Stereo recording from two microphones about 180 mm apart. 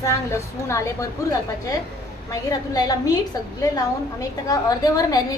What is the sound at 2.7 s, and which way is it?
A woman's voice, 20° left (ahead or behind).